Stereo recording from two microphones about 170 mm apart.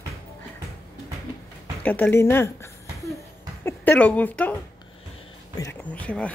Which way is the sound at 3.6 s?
10° left (ahead or behind).